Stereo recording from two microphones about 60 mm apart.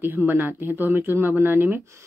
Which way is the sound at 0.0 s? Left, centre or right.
Right.